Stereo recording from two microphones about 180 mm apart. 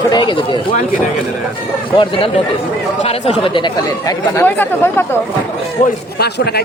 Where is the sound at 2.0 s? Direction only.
30° left (ahead or behind).